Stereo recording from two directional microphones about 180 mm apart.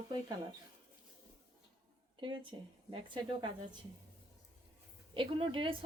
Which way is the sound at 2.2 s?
30° right (ahead or behind).